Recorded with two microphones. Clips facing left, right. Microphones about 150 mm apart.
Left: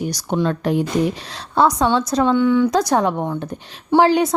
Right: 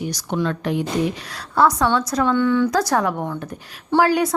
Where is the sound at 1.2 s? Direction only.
25° left (ahead or behind).